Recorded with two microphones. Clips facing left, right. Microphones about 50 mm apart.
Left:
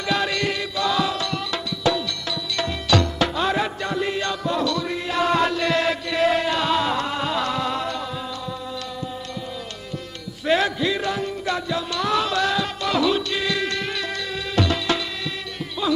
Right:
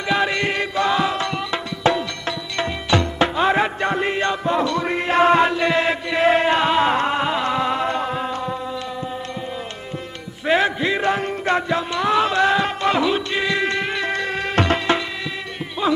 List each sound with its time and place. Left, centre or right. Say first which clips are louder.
0.1 s music: right 3 dB; right
10.4 s music: right 2 dB; right